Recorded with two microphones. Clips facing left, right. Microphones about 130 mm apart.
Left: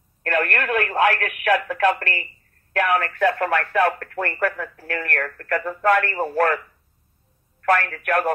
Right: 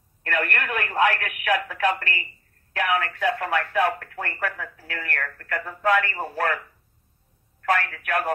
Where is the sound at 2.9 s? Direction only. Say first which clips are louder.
Left 3 dB; 60° left (ahead or behind).